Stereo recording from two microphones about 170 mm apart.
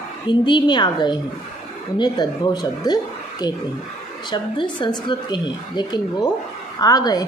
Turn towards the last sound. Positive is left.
turn(degrees=25)  # may be behind; listen again after turning